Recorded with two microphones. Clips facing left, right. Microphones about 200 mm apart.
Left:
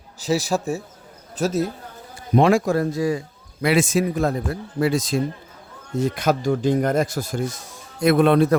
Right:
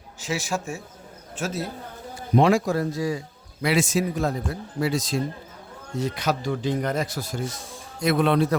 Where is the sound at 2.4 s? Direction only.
55° left (ahead or behind).